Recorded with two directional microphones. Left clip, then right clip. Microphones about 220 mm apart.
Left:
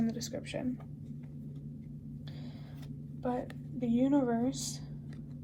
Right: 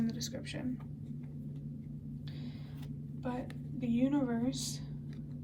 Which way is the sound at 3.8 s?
25° left (ahead or behind).